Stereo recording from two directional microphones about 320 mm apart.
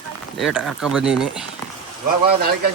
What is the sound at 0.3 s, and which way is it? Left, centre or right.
Speech, centre.